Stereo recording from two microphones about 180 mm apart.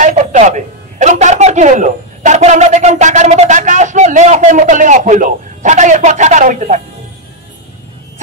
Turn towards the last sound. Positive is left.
turn(degrees=-45)  # may be behind; listen again after turning